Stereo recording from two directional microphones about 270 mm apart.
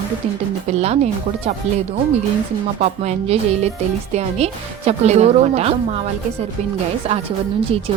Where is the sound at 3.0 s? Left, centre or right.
Right.